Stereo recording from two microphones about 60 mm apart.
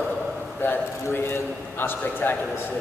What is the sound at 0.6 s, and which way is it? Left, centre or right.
A man's voice, left.